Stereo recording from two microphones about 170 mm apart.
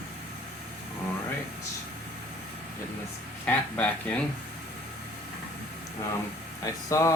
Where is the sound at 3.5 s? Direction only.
10° left (ahead or behind).